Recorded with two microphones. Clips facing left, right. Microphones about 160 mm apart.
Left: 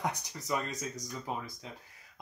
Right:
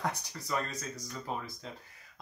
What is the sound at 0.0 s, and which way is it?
Speech, 20° left (ahead or behind).